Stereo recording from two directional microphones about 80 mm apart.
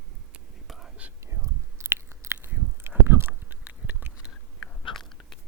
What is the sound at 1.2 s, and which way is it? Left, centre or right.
Chewing, right.